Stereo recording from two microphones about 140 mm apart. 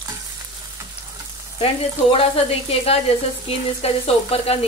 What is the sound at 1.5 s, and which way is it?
Speech, 45° left (ahead or behind).